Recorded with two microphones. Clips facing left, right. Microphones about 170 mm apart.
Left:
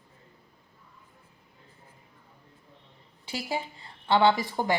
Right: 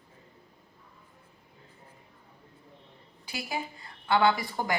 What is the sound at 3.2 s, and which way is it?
A woman's voice, 25° left (ahead or behind).